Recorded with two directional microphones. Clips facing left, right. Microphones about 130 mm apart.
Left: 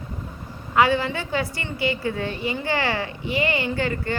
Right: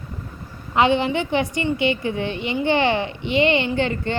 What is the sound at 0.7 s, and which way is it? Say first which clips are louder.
A woman's voice: right 2 dB; 20° right (ahead or behind).